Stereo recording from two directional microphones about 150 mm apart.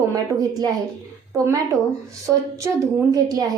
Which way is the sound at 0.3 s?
25° right (ahead or behind).